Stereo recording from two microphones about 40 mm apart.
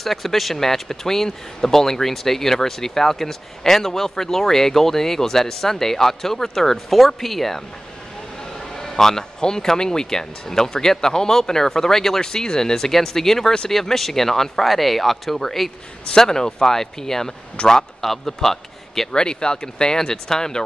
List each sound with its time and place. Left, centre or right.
0.0 s a man's voice: centre
19.1 s speech: centre